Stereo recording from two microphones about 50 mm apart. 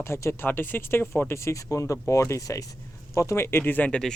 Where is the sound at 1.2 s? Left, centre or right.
Left.